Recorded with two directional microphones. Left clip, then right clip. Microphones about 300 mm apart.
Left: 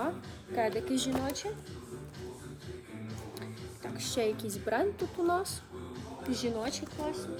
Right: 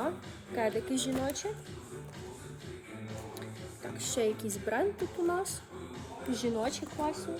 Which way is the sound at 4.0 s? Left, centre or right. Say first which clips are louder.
Even; centre.